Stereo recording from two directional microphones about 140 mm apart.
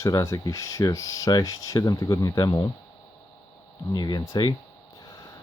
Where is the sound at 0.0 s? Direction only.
25° left (ahead or behind).